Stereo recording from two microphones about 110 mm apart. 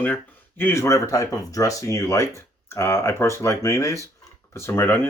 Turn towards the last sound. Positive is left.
turn(degrees=20)  # may be behind; listen again after turning